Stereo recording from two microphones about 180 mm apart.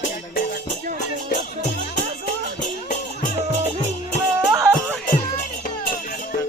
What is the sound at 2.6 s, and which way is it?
Music, 45° left (ahead or behind).